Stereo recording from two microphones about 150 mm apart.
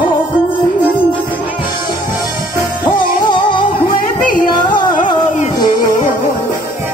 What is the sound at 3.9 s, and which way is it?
Music, 65° left (ahead or behind).